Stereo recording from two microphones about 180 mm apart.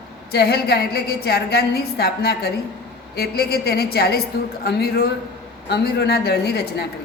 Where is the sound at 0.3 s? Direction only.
60° left (ahead or behind).